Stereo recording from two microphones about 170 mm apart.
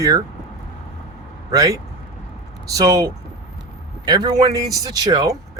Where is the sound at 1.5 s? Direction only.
20° right (ahead or behind).